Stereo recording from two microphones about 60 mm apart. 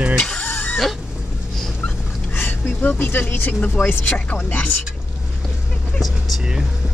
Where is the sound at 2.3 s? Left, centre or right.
Left.